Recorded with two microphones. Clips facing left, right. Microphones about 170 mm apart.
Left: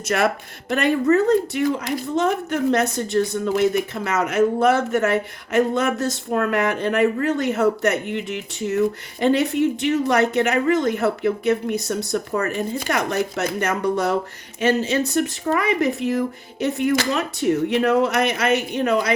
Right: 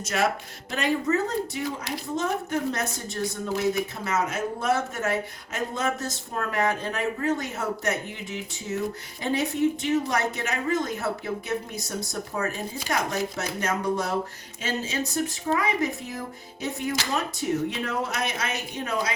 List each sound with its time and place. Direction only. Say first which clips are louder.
0.1 s speech: left 5 dB; 60° left (ahead or behind)